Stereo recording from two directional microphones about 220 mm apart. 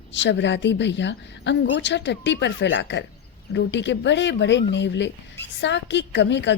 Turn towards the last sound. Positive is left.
turn(degrees=55)  # may be behind; listen again after turning